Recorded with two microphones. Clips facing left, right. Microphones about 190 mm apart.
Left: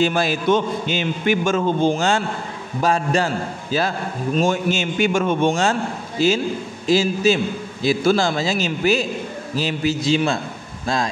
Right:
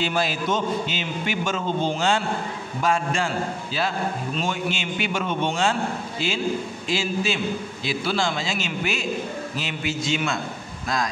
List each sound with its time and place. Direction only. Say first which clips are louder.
0.0 s a man's voice: left 6 dB; 50° left (ahead or behind)
4.4 s a man's voice: left 9 dB; 45° left (ahead or behind)